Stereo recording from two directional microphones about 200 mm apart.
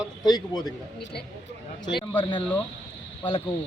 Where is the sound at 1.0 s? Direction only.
55° left (ahead or behind).